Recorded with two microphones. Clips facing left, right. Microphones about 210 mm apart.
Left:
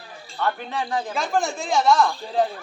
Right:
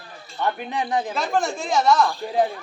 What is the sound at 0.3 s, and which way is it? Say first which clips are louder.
Speech: right 1 dB; 15° right (ahead or behind).